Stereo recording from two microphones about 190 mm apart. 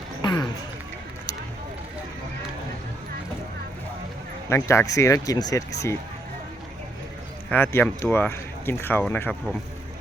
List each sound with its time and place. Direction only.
0.2 s a sound: 25° left (ahead or behind)
4.4 s speech: 15° left (ahead or behind)
7.5 s speech: 10° left (ahead or behind)